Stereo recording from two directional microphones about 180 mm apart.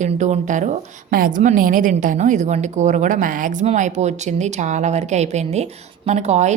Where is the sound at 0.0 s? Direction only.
45° right (ahead or behind).